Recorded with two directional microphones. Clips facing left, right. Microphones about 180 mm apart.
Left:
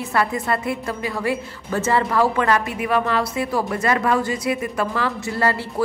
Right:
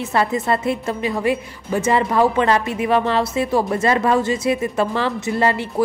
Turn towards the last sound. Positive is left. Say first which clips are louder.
# right 3 dB
turn(degrees=-20)  # may be behind; listen again after turning